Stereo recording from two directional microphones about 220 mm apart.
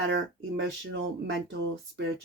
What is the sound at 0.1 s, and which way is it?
Speech, 55° right (ahead or behind).